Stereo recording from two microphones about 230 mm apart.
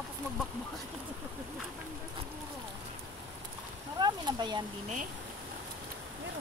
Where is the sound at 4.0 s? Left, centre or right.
Centre.